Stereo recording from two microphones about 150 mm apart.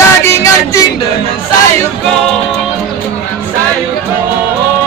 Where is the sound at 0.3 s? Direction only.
20° left (ahead or behind).